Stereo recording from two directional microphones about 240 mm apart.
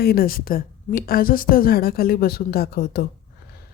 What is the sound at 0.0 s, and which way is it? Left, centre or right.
A woman's voice, left.